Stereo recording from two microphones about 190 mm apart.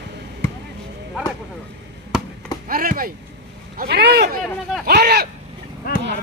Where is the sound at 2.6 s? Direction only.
50° right (ahead or behind).